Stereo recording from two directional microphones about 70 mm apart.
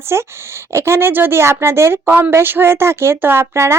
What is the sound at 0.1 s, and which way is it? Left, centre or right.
Speech, right.